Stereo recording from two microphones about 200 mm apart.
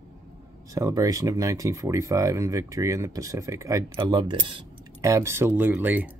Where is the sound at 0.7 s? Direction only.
15° right (ahead or behind).